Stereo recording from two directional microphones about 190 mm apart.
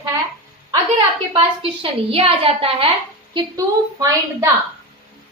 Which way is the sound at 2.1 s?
30° right (ahead or behind).